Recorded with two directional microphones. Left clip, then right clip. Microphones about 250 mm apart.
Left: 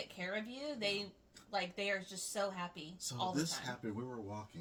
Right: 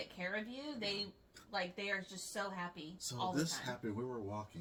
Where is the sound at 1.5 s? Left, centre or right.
Left.